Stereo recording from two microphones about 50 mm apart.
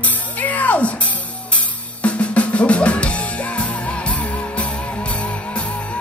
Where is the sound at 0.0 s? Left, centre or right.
Left.